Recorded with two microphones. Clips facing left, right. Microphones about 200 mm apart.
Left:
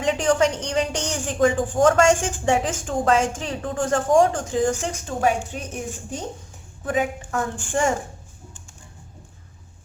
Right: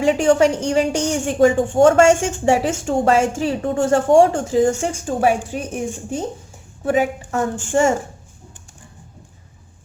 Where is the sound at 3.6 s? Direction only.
25° right (ahead or behind).